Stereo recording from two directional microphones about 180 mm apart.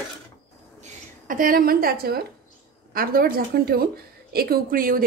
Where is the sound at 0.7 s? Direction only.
50° right (ahead or behind).